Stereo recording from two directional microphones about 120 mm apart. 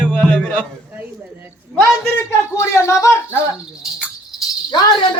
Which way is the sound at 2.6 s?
25° left (ahead or behind).